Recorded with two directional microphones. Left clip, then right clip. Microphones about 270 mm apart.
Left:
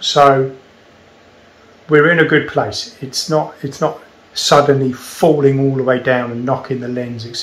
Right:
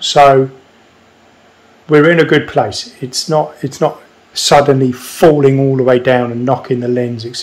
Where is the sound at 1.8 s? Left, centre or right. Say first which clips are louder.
Right 2 dB; right.